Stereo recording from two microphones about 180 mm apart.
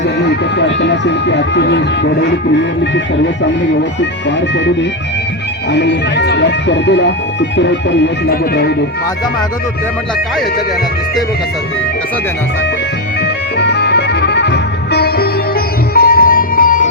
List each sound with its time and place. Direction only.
0.2 s speech: 75° left (ahead or behind)
5.7 s speech: 75° left (ahead or behind)
7.5 s music: 80° left
13.6 s music: 65° left (ahead or behind); by 16.9 s 50° left (ahead or behind)